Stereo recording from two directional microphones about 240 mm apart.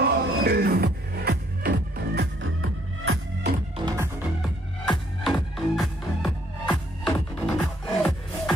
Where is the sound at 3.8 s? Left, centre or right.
Centre.